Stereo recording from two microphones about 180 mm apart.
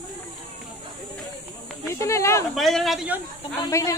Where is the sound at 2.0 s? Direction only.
15° left (ahead or behind).